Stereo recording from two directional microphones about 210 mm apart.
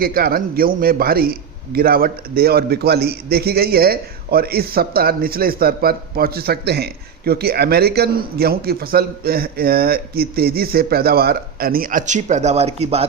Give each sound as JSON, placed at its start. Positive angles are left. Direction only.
{"t": 0.0, "sound": "a man's voice", "side_deg": -45}